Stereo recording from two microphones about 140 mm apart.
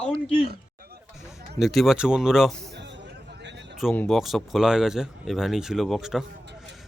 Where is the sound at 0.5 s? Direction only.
90° right.